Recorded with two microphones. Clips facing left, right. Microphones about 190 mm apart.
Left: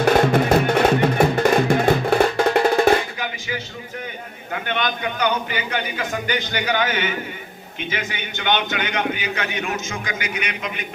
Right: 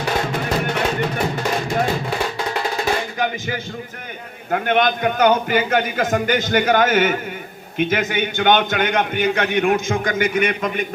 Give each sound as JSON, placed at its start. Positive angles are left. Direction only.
{"t": 0.0, "sound": "music", "side_deg": 55}
{"t": 4.5, "sound": "a man's voice", "side_deg": -50}